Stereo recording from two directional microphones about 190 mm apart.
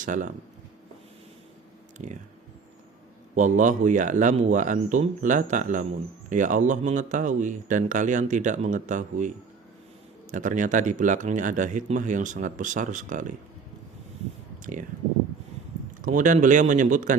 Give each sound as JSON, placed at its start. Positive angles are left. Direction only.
{"t": 0.0, "sound": "speech", "side_deg": -45}
{"t": 3.3, "sound": "speech", "side_deg": -40}
{"t": 10.3, "sound": "speech", "side_deg": -40}
{"t": 14.6, "sound": "speech", "side_deg": -45}
{"t": 16.0, "sound": "speech", "side_deg": -45}